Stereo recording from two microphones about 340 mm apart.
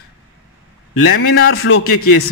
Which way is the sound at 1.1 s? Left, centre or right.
Left.